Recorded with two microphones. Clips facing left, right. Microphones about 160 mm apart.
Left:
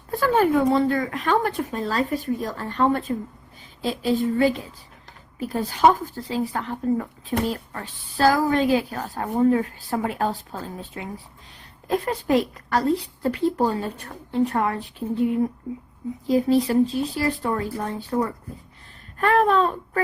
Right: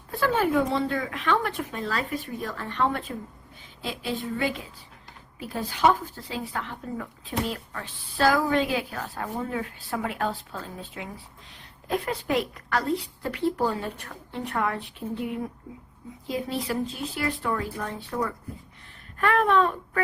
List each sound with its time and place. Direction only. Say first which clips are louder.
0.1 s speech: left 4 dB; 45° left (ahead or behind)
5.5 s speech: left 4 dB; 40° left (ahead or behind)
16.2 s speech: left 10 dB; 35° left (ahead or behind)